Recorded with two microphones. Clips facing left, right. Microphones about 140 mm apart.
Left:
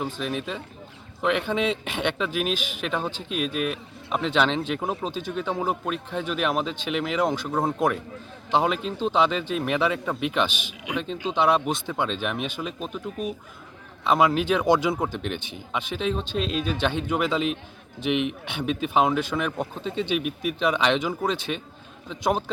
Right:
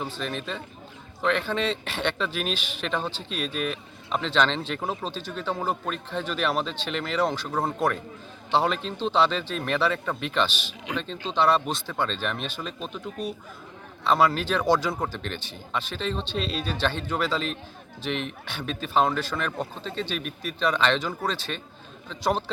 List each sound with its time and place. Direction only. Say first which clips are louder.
0.0 s speech: left 3 dB; 10° left (ahead or behind)
14.1 s speech: left 2 dB; 10° left (ahead or behind)